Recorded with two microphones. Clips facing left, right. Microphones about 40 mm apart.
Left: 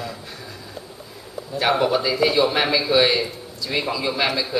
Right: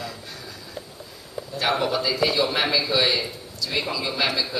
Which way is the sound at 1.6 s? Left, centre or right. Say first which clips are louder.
Left 4 dB; centre.